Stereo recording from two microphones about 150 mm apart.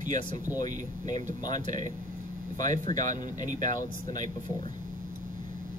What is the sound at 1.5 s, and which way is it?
Speech, 55° right (ahead or behind).